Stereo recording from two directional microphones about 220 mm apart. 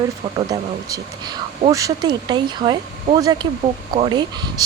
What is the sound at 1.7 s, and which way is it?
Speech, 15° right (ahead or behind).